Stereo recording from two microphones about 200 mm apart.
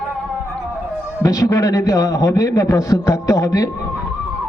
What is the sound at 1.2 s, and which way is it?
A man's voice, 15° left (ahead or behind).